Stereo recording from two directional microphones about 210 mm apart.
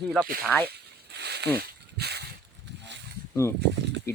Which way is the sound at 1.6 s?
50° right (ahead or behind).